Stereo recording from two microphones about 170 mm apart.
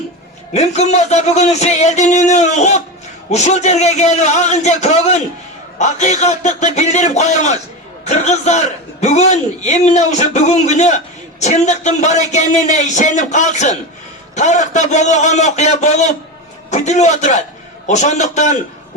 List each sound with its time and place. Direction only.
0.5 s a man's voice: 40° left (ahead or behind)